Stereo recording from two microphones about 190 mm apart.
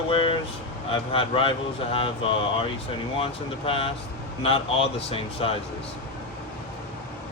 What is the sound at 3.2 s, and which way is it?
A man's voice, 30° left (ahead or behind).